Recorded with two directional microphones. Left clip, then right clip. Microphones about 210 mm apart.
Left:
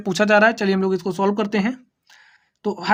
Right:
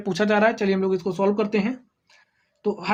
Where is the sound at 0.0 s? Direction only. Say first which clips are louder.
Left 5 dB; 35° left (ahead or behind).